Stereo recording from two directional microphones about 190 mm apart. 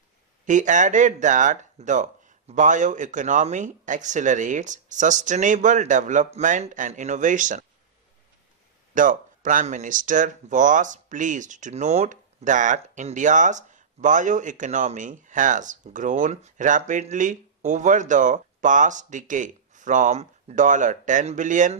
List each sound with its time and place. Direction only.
0.4 s speech: 40° right (ahead or behind)
9.0 s speech: 45° right (ahead or behind)